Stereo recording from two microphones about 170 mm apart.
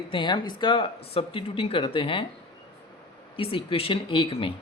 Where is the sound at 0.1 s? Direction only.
30° left (ahead or behind).